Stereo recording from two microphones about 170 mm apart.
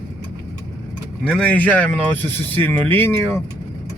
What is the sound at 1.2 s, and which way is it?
Speech, 5° left (ahead or behind).